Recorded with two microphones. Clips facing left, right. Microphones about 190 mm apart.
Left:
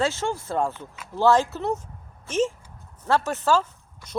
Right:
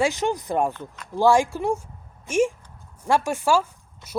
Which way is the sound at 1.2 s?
10° right (ahead or behind).